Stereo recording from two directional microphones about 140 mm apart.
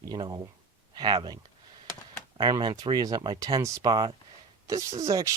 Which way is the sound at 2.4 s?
30° right (ahead or behind).